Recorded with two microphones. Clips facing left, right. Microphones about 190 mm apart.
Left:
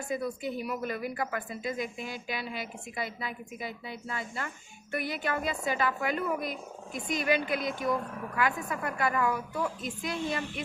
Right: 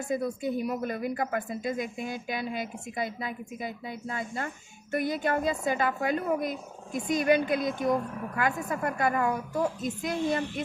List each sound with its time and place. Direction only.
0.2 s speech: 50° right (ahead or behind)